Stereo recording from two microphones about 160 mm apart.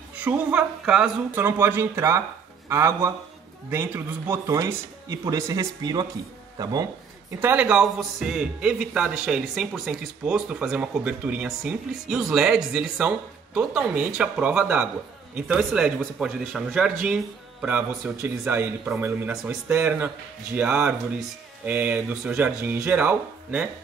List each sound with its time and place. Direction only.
0.2 s a man's voice: 10° right (ahead or behind)